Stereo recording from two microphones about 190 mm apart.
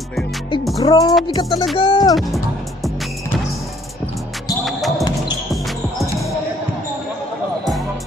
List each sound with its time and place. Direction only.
0.7 s music: 20° left (ahead or behind)
2.1 s music: centre (ahead or behind)
4.6 s basketball bounce: centre (ahead or behind)